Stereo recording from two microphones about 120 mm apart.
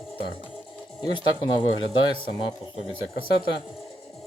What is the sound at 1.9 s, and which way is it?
Speech, 45° left (ahead or behind).